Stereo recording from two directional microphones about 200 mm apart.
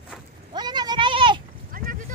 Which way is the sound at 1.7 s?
45° right (ahead or behind).